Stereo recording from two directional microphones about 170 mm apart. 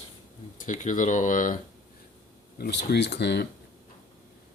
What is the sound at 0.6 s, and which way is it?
Speech, 45° left (ahead or behind).